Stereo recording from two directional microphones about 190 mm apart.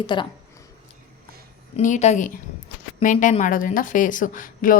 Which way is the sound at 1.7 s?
35° left (ahead or behind).